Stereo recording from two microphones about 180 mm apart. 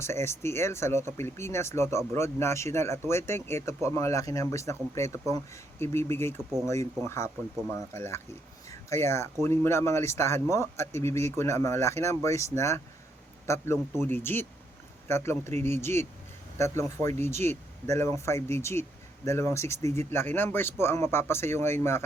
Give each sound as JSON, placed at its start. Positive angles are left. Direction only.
{"t": 0.0, "sound": "speech", "side_deg": 15}